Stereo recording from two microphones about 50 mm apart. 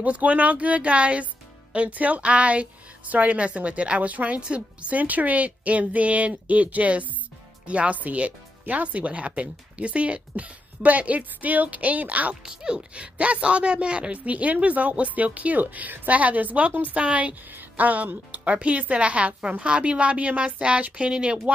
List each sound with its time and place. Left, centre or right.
0.0 s speech: right
12.4 s speech: centre